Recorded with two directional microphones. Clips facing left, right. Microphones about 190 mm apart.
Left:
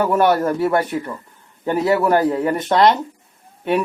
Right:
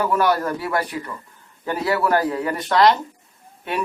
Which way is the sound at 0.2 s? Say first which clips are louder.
Left 5 dB; 25° left (ahead or behind).